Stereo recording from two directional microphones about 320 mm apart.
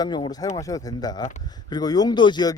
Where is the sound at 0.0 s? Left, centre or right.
Centre.